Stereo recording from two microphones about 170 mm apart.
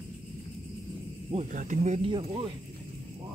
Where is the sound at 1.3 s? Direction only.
45° right (ahead or behind).